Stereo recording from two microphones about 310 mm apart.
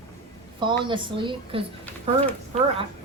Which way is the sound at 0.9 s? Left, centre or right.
Centre.